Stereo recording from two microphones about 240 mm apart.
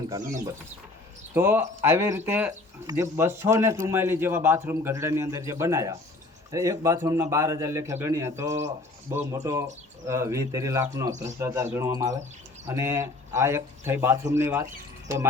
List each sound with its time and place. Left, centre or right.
1.3 s speech: centre